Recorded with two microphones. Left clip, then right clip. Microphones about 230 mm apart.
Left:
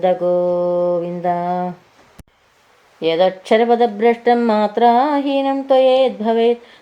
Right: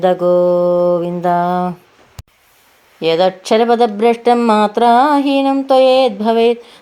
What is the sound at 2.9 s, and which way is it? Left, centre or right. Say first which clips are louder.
Speech: right 2 dB; right.